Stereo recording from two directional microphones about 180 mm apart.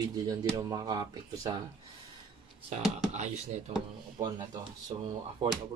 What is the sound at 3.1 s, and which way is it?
Speech, 40° right (ahead or behind).